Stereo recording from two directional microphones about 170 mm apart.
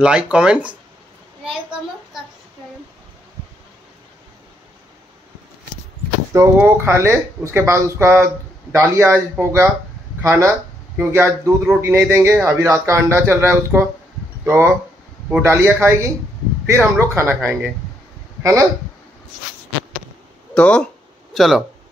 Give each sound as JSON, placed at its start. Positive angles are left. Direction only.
{"t": 0.0, "sound": "speech", "side_deg": -5}
{"t": 1.4, "sound": "child singing", "side_deg": -5}
{"t": 6.3, "sound": "a man's voice", "side_deg": -15}
{"t": 20.5, "sound": "a sound", "side_deg": 5}